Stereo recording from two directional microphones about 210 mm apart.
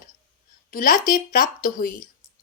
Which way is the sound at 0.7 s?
40° left (ahead or behind).